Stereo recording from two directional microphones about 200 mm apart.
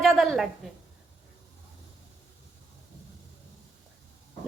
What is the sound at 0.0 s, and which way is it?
Speech, centre (ahead or behind).